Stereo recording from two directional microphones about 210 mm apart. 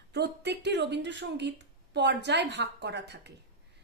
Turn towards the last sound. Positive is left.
turn(degrees=-55)  # may be behind; listen again after turning